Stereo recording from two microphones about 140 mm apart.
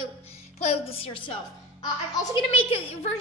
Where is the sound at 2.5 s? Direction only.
40° left (ahead or behind).